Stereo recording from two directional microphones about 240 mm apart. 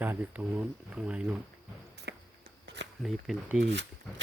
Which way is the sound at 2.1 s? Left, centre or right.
Right.